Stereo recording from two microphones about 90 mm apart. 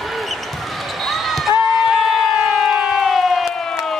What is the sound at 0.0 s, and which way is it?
Basketball bounce, centre (ahead or behind).